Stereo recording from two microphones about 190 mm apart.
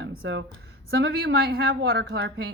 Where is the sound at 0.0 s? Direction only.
70° right (ahead or behind).